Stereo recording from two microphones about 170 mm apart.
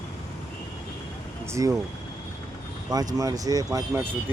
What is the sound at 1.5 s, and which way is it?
Speech, 15° right (ahead or behind).